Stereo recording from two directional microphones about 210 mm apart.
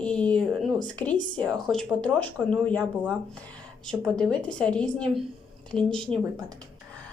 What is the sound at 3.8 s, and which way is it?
Speech, 5° left (ahead or behind).